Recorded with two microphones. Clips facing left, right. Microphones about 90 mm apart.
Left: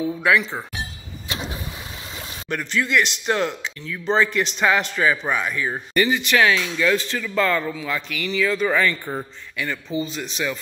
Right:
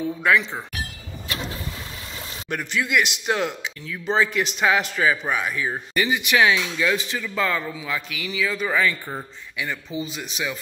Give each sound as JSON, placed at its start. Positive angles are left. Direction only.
{"t": 0.0, "sound": "speech", "side_deg": 0}
{"t": 1.3, "sound": "vehicle", "side_deg": 20}
{"t": 2.5, "sound": "a man's voice", "side_deg": -10}